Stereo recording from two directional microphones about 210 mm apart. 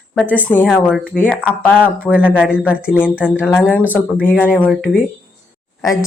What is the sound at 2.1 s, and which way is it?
Speech, 5° right (ahead or behind).